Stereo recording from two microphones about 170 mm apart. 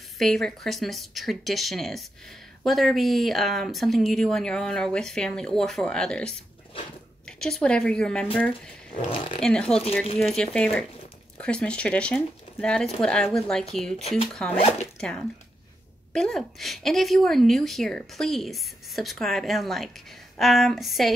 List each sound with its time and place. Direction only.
0.2 s a woman's voice: centre (ahead or behind)
9.1 s speech: 30° left (ahead or behind)
9.4 s a woman's voice: 5° left (ahead or behind)
13.9 s speech: 35° left (ahead or behind)
14.3 s a woman's voice: 5° left (ahead or behind)
14.6 s speech: 35° left (ahead or behind)
15.0 s a woman's voice: 5° left (ahead or behind)